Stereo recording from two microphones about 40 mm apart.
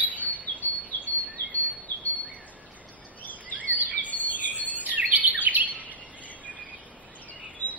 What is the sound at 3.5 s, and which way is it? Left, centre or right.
Bird vocalization, right.